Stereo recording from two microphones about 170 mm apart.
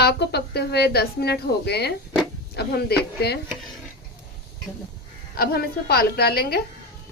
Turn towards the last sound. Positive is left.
turn(degrees=65)  # may be behind; listen again after turning